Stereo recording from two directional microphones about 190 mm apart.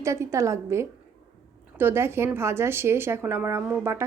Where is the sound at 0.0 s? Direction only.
15° right (ahead or behind).